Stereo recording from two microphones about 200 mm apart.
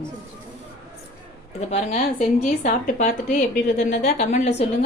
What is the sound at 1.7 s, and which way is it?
A woman's voice, 30° left (ahead or behind).